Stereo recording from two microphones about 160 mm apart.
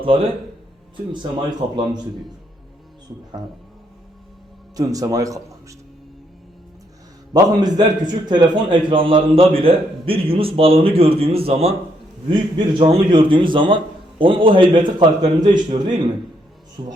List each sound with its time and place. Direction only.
0.0 s a man's voice: 35° right (ahead or behind)
1.7 s speech: 25° right (ahead or behind)
4.8 s speech: 20° right (ahead or behind)
7.3 s a man's voice: 25° right (ahead or behind)